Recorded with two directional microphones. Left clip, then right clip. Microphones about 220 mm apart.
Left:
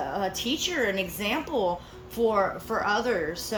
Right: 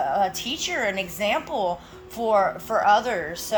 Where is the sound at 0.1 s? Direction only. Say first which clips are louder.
Right 5 dB; 10° right (ahead or behind).